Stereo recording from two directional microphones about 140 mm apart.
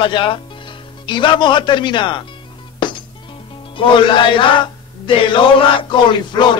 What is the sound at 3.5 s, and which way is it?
A man's voice, 35° left (ahead or behind).